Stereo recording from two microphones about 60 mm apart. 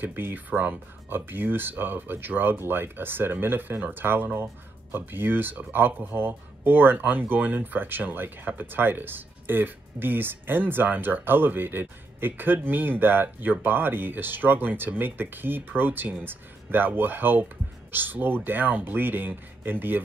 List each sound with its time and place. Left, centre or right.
0.0 s speech: right